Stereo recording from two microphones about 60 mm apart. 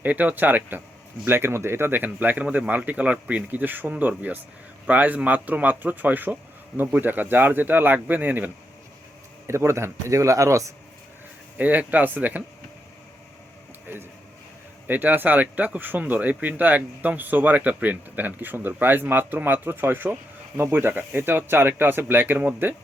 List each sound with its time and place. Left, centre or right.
0.0 s speech: right
1.3 s speech: right
9.5 s speech: right
11.5 s speech: right
14.8 s speech: right